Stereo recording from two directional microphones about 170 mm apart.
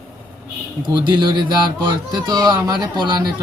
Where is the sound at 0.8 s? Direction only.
25° right (ahead or behind).